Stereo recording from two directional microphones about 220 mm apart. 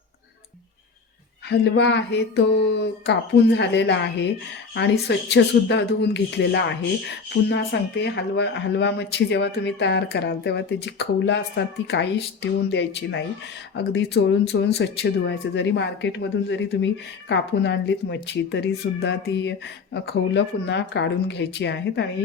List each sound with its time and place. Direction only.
1.5 s speech: 50° left (ahead or behind)